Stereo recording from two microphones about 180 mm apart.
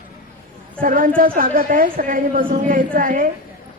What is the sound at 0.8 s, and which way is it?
A woman's voice, 50° right (ahead or behind).